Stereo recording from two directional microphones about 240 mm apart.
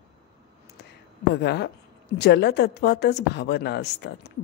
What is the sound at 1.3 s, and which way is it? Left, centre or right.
A woman's voice, left.